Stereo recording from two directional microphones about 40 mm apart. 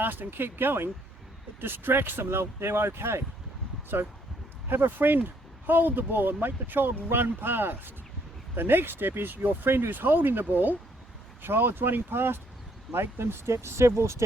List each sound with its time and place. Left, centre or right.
0.0 s speech: right
3.9 s speech: right
9.9 s speech: right
11.4 s speech: right
12.9 s speech: right